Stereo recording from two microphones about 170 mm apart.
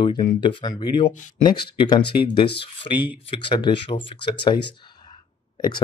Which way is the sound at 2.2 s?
30° left (ahead or behind).